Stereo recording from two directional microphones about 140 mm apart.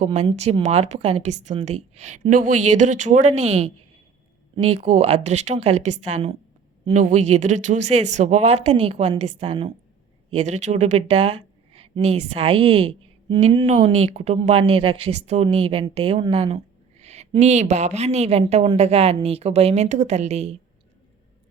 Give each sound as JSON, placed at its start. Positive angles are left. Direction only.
{"t": 0.0, "sound": "speech", "side_deg": -50}
{"t": 2.3, "sound": "speech", "side_deg": -70}
{"t": 6.9, "sound": "speech", "side_deg": -60}
{"t": 10.3, "sound": "speech", "side_deg": -55}
{"t": 13.7, "sound": "speech", "side_deg": -50}
{"t": 14.6, "sound": "a woman's voice", "side_deg": -40}